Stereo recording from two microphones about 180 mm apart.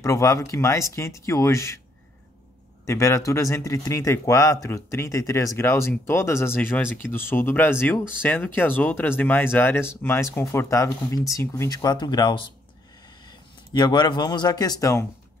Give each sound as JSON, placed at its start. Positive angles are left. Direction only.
{"t": 0.0, "sound": "a man's voice", "side_deg": 15}
{"t": 2.9, "sound": "a man's voice", "side_deg": 15}
{"t": 13.7, "sound": "speech", "side_deg": 20}